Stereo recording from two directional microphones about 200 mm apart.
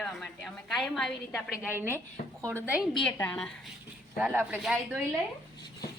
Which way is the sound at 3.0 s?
5° left (ahead or behind).